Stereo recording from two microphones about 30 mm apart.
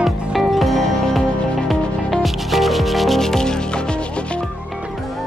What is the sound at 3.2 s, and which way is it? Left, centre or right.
Music, centre.